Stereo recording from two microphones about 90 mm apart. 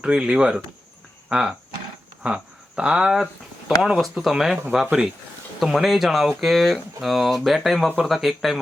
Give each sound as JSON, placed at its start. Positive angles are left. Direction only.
{"t": 0.0, "sound": "speech", "side_deg": -10}